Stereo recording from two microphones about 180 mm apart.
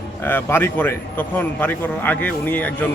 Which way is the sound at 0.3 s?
10° left (ahead or behind).